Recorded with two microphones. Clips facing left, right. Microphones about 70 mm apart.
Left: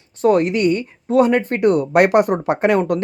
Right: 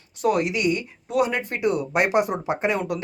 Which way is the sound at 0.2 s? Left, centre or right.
Left.